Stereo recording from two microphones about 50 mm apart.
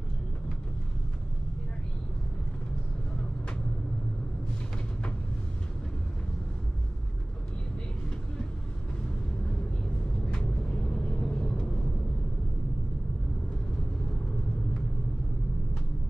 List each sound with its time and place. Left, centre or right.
10.3 s vehicle: centre